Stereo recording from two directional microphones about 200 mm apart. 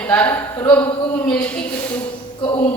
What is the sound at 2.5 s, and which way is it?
Speech, 25° left (ahead or behind).